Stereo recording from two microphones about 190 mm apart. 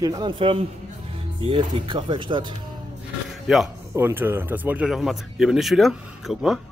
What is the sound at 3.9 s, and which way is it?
Speech, 10° right (ahead or behind).